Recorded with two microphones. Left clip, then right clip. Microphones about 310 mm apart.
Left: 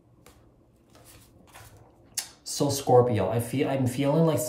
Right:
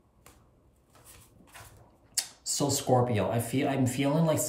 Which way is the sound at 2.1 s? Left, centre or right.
Centre.